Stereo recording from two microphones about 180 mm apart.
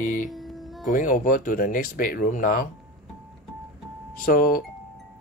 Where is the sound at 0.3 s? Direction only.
Centre (ahead or behind).